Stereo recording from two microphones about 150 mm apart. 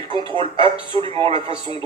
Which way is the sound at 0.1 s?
35° right (ahead or behind).